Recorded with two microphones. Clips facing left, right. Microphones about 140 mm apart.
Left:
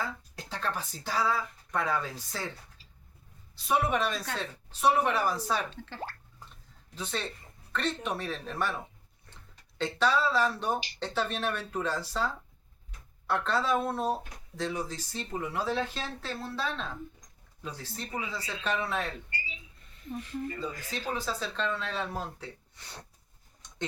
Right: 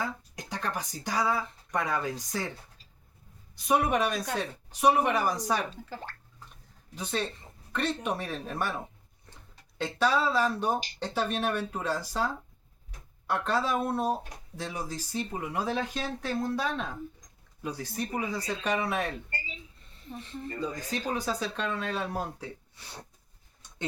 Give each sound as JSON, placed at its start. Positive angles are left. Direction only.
{"t": 0.3, "sound": "speech", "side_deg": -15}
{"t": 3.5, "sound": "speech", "side_deg": -15}
{"t": 9.7, "sound": "speech", "side_deg": -10}
{"t": 19.3, "sound": "speech", "side_deg": -50}
{"t": 19.9, "sound": "speech", "side_deg": -30}
{"t": 21.1, "sound": "speech", "side_deg": -15}